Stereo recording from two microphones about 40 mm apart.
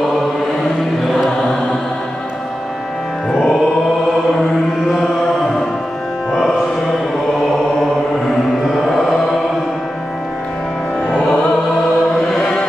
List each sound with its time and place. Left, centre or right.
1.0 s choir: centre
3.3 s music: centre
8.8 s mantra: centre